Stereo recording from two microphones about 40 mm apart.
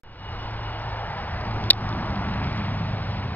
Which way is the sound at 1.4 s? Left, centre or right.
Left.